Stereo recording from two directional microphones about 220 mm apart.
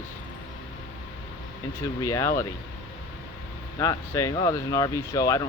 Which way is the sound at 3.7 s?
15° left (ahead or behind).